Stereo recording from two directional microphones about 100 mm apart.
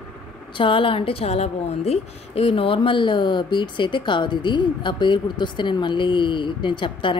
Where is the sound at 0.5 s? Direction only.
60° left (ahead or behind); by 2.7 s 80° left.